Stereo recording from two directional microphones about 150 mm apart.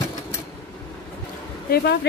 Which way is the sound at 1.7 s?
90° left.